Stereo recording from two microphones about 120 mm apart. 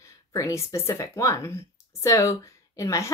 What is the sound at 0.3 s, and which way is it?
Speech, 25° left (ahead or behind).